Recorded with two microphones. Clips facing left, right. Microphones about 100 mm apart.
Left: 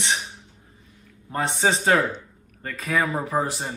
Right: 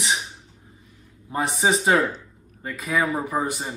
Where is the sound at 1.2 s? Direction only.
5° right (ahead or behind).